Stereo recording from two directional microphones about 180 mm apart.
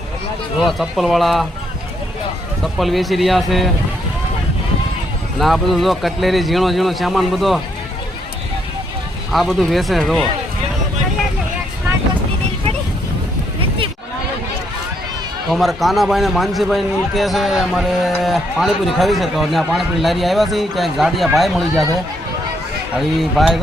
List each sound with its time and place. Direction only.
0.6 s a man's voice: centre (ahead or behind)
2.7 s a man's voice: centre (ahead or behind)
5.4 s a man's voice: centre (ahead or behind)
9.3 s a man's voice: centre (ahead or behind)
13.6 s a sound: 30° right (ahead or behind)
15.4 s a man's voice: centre (ahead or behind)
23.4 s a man's voice: centre (ahead or behind)